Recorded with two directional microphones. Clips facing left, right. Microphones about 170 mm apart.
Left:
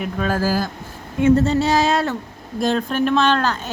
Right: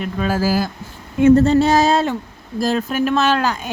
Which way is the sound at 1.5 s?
55° right (ahead or behind).